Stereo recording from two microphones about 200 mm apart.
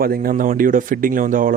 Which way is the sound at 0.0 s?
45° right (ahead or behind).